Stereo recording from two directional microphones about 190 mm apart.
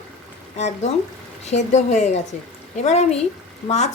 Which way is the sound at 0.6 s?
35° left (ahead or behind).